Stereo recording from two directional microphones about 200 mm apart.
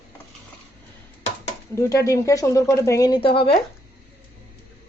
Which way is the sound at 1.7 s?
15° left (ahead or behind).